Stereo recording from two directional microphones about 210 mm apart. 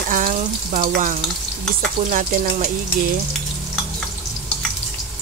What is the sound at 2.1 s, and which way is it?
Speech, 40° right (ahead or behind).